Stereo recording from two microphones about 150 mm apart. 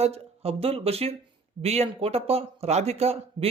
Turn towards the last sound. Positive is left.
turn(degrees=-45)  # may be behind; listen again after turning